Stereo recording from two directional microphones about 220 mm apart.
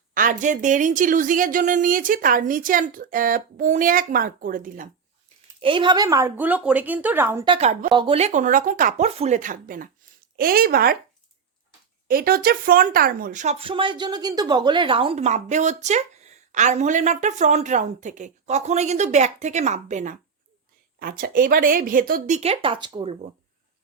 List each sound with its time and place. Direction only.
0.1 s speech: 40° right (ahead or behind)
5.6 s speech: 20° right (ahead or behind)
7.4 s a woman's voice: 25° right (ahead or behind); by 10.9 s 45° right (ahead or behind)
12.0 s speech: 40° right (ahead or behind)
22.4 s speech: 25° right (ahead or behind)